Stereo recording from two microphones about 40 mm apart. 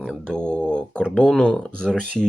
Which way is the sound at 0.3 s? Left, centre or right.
Left.